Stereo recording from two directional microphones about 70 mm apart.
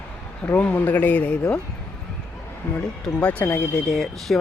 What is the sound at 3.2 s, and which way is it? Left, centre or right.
Speech, centre.